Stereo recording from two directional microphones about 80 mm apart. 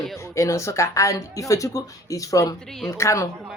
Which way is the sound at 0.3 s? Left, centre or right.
Left.